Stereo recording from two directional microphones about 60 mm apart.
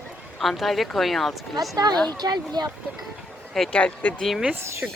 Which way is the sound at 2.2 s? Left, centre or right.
Right.